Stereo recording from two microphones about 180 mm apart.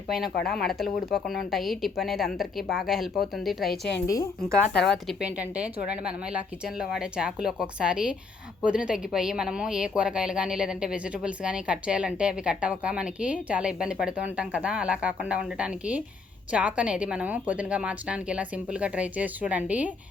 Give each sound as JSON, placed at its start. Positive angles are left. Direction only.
{"t": 0.4, "sound": "a woman's voice", "side_deg": 0}
{"t": 4.0, "sound": "a woman's voice", "side_deg": 20}
{"t": 4.7, "sound": "a woman's voice", "side_deg": 5}